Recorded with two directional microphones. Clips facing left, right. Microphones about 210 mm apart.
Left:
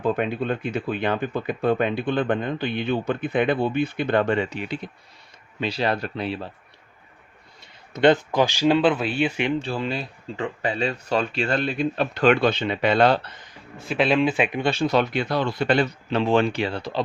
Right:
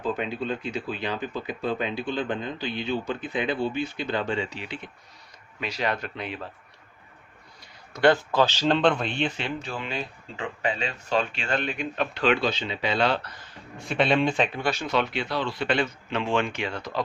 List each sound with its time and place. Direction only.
0.0 s speech: 55° left (ahead or behind)
5.5 s speech: 30° left (ahead or behind)
7.6 s speech: 20° left (ahead or behind)
9.6 s speech: 35° left (ahead or behind); by 13.1 s 60° left (ahead or behind)
13.2 s speech: 20° left (ahead or behind)
13.7 s a man's voice: centre (ahead or behind)
14.6 s speech: 30° left (ahead or behind)